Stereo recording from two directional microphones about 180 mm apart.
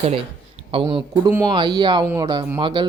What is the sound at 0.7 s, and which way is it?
A man's voice, 30° right (ahead or behind).